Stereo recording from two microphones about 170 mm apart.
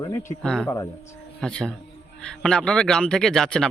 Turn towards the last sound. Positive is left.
turn(degrees=0)  # may be behind; listen again after turning